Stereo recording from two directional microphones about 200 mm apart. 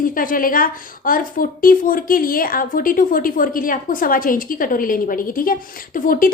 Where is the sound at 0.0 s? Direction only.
45° left (ahead or behind).